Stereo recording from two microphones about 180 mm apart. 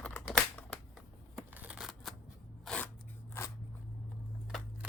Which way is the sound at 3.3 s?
15° left (ahead or behind).